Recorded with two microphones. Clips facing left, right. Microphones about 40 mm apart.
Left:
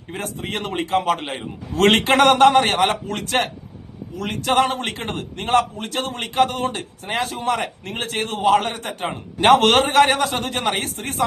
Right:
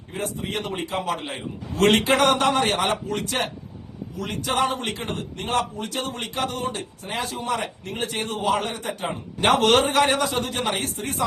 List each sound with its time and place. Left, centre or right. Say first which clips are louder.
0.1 s a man's voice: left 1 dB; left